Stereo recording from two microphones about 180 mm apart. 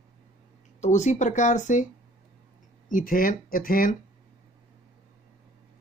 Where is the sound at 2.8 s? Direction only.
50° left (ahead or behind).